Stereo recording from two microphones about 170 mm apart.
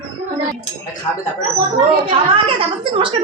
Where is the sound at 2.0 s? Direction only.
30° right (ahead or behind).